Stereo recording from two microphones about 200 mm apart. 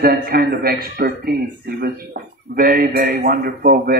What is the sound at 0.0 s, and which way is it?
A man's voice, 45° right (ahead or behind).